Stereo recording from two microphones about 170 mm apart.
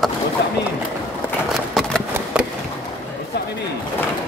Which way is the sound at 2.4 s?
5° right (ahead or behind).